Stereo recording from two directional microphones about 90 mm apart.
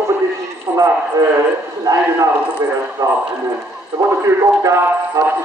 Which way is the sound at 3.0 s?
30° right (ahead or behind).